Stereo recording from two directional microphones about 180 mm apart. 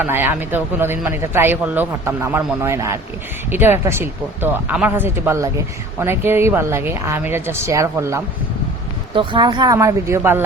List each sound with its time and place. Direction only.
0.0 s speech: 10° right (ahead or behind)
9.1 s speech: 25° right (ahead or behind)